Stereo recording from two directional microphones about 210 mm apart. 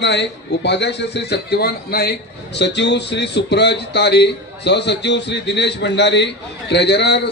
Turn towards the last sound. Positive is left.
turn(degrees=55)  # may be behind; listen again after turning